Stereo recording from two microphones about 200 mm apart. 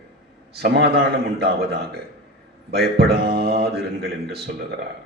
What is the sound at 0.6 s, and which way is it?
A man's voice, 55° right (ahead or behind).